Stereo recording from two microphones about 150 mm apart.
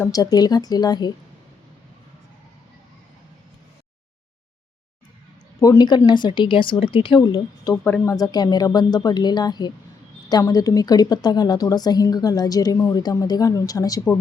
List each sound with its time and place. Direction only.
0.0 s a woman's voice: 25° left (ahead or behind)
5.5 s a woman's voice: 25° left (ahead or behind)